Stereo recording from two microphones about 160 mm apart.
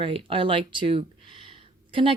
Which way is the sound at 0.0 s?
35° right (ahead or behind).